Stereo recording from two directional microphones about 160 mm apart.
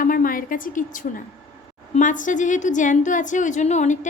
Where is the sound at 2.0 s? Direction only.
55° left (ahead or behind).